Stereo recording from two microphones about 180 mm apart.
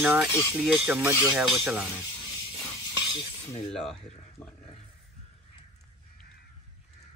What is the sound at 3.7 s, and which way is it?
Speech, 5° left (ahead or behind).